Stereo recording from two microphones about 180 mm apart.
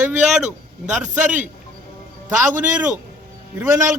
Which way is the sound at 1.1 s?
10° right (ahead or behind).